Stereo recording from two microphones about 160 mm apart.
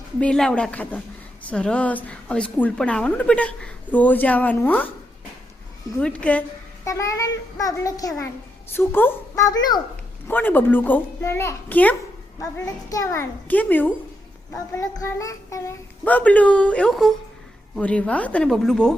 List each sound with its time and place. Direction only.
0.2 s a woman's voice: 5° left (ahead or behind)
6.0 s a woman's voice: 5° left (ahead or behind)
6.8 s a child's voice: 20° left (ahead or behind)
10.2 s a woman's voice: 10° left (ahead or behind)
12.4 s a woman's voice: 20° left (ahead or behind); by 18.9 s 5° left (ahead or behind)